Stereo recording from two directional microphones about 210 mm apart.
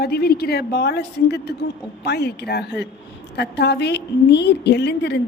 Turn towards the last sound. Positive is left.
turn(degrees=55)  # may be behind; listen again after turning